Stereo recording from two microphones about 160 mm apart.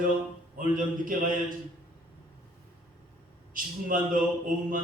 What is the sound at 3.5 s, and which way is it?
Speech, 60° right (ahead or behind).